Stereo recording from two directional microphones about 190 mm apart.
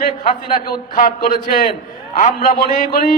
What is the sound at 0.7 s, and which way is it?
A man's voice, 50° left (ahead or behind).